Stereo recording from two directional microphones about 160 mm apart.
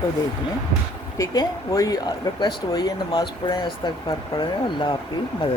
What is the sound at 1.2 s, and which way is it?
Speech, 20° left (ahead or behind).